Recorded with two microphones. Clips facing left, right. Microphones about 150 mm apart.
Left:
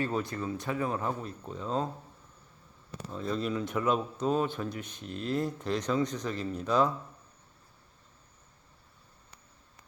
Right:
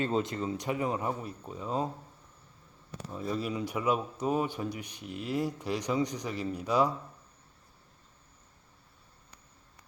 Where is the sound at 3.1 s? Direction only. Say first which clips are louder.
Left 1 dB; 10° right (ahead or behind).